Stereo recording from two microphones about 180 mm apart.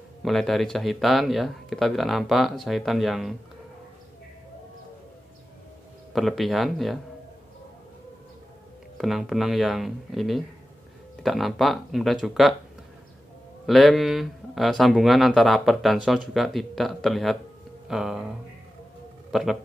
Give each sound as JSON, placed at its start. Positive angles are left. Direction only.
{"t": 0.2, "sound": "speech", "side_deg": 0}
{"t": 6.1, "sound": "speech", "side_deg": 0}
{"t": 8.9, "sound": "speech", "side_deg": 0}
{"t": 13.7, "sound": "speech", "side_deg": 0}
{"t": 19.3, "sound": "speech", "side_deg": 0}